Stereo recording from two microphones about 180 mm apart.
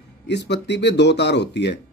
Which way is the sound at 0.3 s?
70° left (ahead or behind).